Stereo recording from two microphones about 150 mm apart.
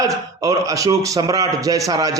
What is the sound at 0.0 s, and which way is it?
A man's voice, 20° right (ahead or behind).